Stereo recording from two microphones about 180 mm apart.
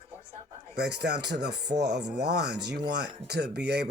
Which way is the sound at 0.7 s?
65° right (ahead or behind).